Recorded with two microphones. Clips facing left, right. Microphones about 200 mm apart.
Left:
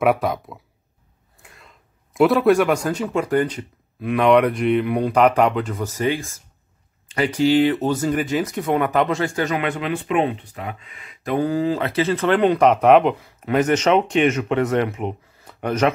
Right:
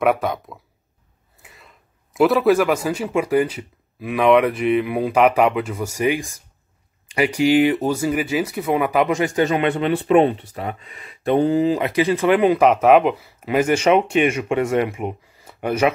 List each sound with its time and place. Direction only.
0.0 s speech: centre (ahead or behind)
1.4 s a sound: 5° right (ahead or behind)
2.1 s speech: centre (ahead or behind)